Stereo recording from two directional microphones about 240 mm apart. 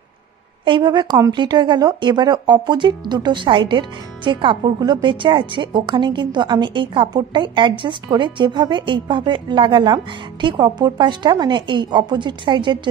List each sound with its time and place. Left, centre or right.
0.7 s speech: centre